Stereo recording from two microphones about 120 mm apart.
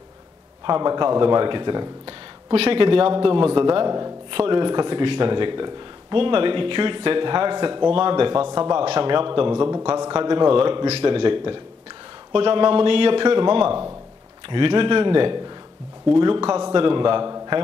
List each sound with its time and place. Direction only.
0.7 s a man's voice: 35° right (ahead or behind)
2.5 s a man's voice: 50° right (ahead or behind); by 4.1 s 35° right (ahead or behind)
4.3 s a man's voice: 45° right (ahead or behind)
8.5 s a man's voice: 30° right (ahead or behind)
8.7 s a man's voice: 50° right (ahead or behind)
9.9 s a man's voice: 35° right (ahead or behind)